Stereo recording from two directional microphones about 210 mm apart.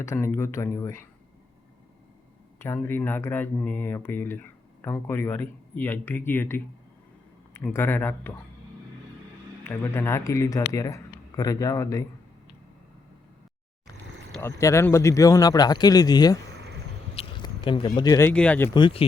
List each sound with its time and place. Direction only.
0.0 s speech: 10° left (ahead or behind)
2.6 s speech: 10° left (ahead or behind)
9.6 s speech: 10° left (ahead or behind)
14.4 s speech: 15° left (ahead or behind)
17.2 s a sound: 20° left (ahead or behind)
18.3 s speech: 5° left (ahead or behind)
18.7 s speech: 25° left (ahead or behind)